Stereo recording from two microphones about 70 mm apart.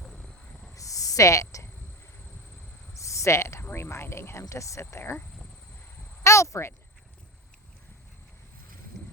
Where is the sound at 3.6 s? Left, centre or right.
Left.